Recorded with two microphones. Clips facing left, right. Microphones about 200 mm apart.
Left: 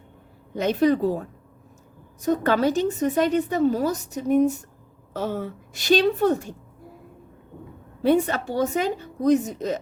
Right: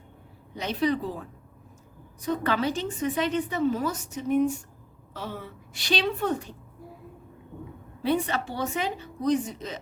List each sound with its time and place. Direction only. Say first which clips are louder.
0.5 s a woman's voice: left 6 dB; 50° left (ahead or behind)
8.0 s a woman's voice: left 6 dB; 45° left (ahead or behind)